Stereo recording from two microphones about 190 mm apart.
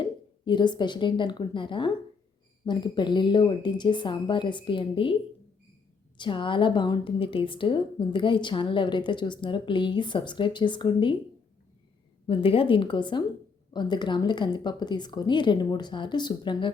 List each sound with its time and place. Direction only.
0.0 s a woman's voice: 25° left (ahead or behind)
6.1 s a woman's voice: 25° left (ahead or behind)
12.2 s a woman's voice: 30° left (ahead or behind)